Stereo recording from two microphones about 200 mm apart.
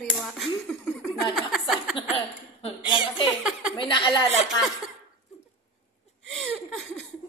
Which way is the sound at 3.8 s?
25° left (ahead or behind).